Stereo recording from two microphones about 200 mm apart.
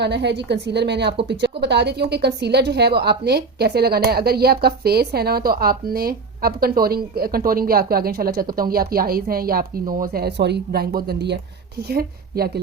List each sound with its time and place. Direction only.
0.0 s a woman's voice: 60° right (ahead or behind)